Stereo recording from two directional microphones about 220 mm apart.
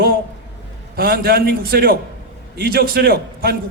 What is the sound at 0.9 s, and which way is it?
A man's voice, 45° right (ahead or behind).